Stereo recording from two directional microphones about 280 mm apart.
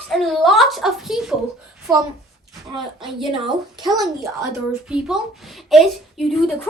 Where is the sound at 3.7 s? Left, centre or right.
Centre.